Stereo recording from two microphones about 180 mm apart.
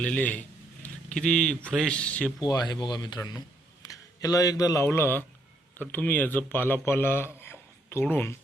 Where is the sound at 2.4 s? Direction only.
20° left (ahead or behind).